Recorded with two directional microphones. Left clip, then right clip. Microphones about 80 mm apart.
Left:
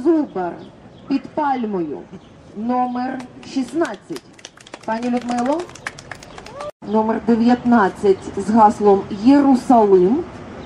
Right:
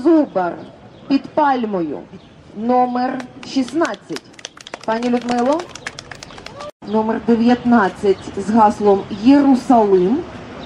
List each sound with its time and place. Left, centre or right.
0.0 s a woman's voice: right
3.7 s a sound: right
6.9 s speech: centre